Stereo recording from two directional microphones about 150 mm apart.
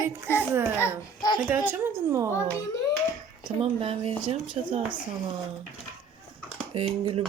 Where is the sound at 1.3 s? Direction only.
15° right (ahead or behind).